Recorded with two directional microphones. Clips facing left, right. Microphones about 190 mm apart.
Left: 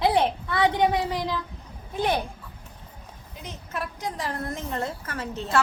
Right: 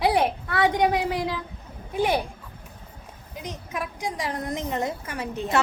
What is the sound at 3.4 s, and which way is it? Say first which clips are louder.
A child's voice: right 2 dB; 10° right (ahead or behind).